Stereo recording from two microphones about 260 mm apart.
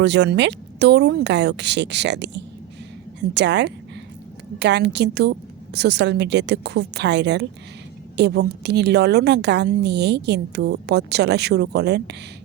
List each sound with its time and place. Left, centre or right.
0.0 s a woman's voice: right